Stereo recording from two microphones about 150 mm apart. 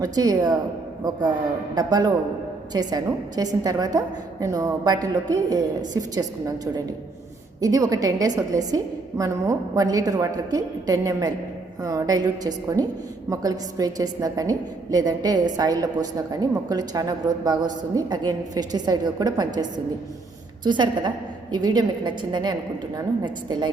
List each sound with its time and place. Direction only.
0.0 s a woman's voice: 25° right (ahead or behind)
1.7 s a woman's voice: 25° right (ahead or behind)
7.6 s a woman's voice: 25° right (ahead or behind)
20.7 s a woman's voice: 30° right (ahead or behind)